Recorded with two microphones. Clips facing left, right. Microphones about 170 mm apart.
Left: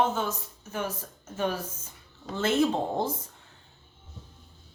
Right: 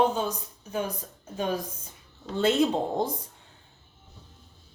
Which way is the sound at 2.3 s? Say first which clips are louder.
Right 2 dB; 15° right (ahead or behind).